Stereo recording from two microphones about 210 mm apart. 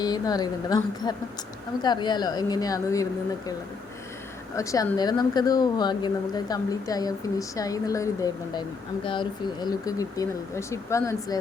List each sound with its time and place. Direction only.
0.0 s a woman's voice: 20° left (ahead or behind)
4.5 s a woman's voice: 15° left (ahead or behind)